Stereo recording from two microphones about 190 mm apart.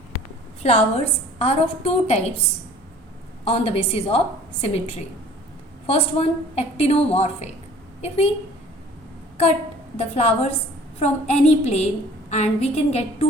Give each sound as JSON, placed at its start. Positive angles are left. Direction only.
{"t": 0.6, "sound": "a woman's voice", "side_deg": 35}
{"t": 3.4, "sound": "a woman's voice", "side_deg": 30}
{"t": 10.0, "sound": "a woman's voice", "side_deg": 35}